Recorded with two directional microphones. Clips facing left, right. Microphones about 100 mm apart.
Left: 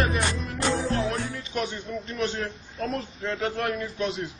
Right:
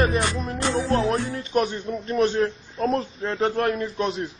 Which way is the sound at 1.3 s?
45° right (ahead or behind).